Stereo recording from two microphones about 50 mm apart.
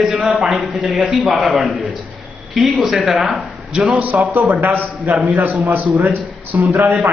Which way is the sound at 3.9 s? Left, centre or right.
Right.